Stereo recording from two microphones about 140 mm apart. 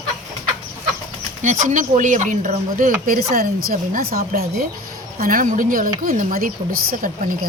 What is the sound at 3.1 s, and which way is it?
A woman's voice, 90° right.